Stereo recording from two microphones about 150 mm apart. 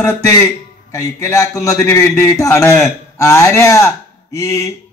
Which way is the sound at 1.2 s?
20° left (ahead or behind).